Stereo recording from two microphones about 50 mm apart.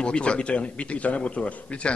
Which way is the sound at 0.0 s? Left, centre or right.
Left.